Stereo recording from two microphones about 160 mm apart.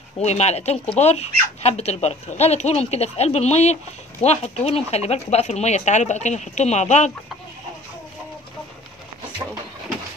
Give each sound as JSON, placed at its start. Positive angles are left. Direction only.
{"t": 0.2, "sound": "speech", "side_deg": 45}